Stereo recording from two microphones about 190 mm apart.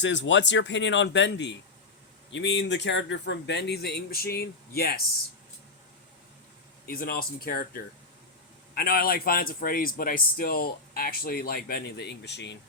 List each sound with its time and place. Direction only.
0.0 s speech: 75° left (ahead or behind); by 4.9 s 55° left (ahead or behind)
6.9 s speech: 50° left (ahead or behind); by 12.5 s 65° left (ahead or behind)